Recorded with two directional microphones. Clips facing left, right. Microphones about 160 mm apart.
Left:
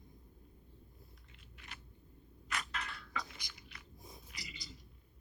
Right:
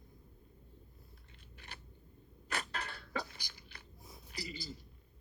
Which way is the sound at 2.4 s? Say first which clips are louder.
Right 2 dB; 35° right (ahead or behind).